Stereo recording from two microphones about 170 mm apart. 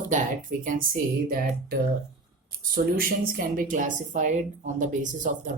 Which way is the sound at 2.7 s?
60° right (ahead or behind).